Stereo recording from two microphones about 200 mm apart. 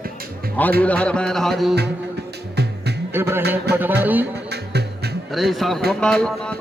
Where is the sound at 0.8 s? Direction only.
5° left (ahead or behind).